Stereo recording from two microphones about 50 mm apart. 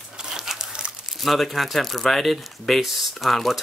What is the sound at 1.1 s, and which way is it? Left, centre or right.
Speech, centre.